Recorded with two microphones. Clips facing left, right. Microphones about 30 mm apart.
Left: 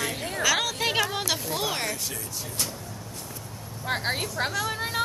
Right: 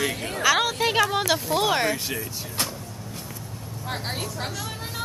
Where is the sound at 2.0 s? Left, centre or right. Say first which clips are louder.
Right 4 dB; right.